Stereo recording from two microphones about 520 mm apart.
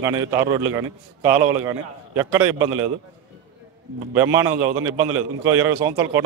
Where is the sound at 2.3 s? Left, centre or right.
Right.